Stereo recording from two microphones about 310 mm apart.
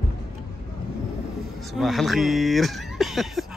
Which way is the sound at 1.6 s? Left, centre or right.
Centre.